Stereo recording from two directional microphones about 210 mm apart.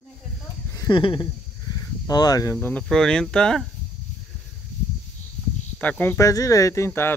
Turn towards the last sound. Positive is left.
turn(degrees=10)  # may be behind; listen again after turning